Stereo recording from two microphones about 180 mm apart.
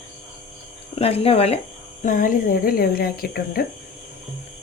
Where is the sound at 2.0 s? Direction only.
45° left (ahead or behind).